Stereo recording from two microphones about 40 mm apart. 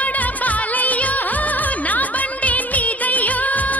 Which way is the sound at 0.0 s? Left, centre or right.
Left.